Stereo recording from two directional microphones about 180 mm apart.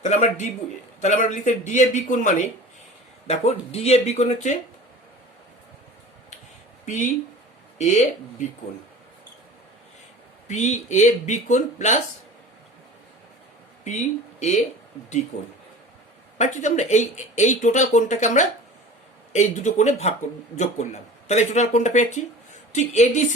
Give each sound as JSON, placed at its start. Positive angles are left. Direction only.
{"t": 0.0, "sound": "a man's voice", "side_deg": 40}
{"t": 6.8, "sound": "a man's voice", "side_deg": 40}
{"t": 10.5, "sound": "speech", "side_deg": 40}
{"t": 13.8, "sound": "a man's voice", "side_deg": 40}
{"t": 21.2, "sound": "speech", "side_deg": 40}